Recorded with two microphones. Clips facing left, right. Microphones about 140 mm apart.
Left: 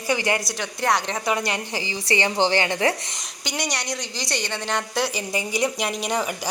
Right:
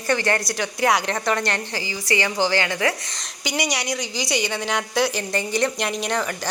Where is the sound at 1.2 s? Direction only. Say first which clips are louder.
Even; 10° left (ahead or behind).